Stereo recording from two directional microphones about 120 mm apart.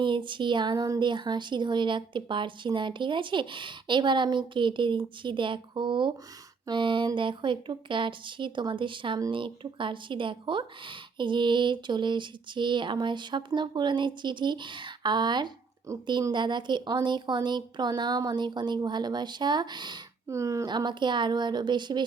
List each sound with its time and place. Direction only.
0.0 s speech: 40° right (ahead or behind)
15.9 s speech: 25° right (ahead or behind)
16.3 s speech: 40° right (ahead or behind)
20.2 s speech: 25° right (ahead or behind)
20.7 s speech: 40° right (ahead or behind)